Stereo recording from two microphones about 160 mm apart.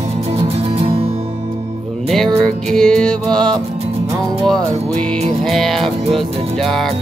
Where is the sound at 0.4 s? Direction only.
35° right (ahead or behind).